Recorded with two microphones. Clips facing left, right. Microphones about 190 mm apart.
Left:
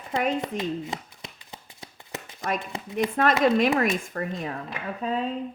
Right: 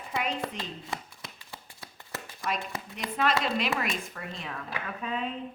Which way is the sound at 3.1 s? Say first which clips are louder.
Left 6 dB; 50° left (ahead or behind).